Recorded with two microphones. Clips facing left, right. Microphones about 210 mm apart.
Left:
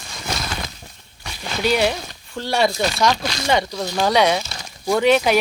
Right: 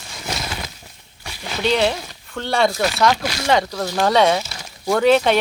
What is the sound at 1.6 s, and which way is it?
Speech, 10° left (ahead or behind).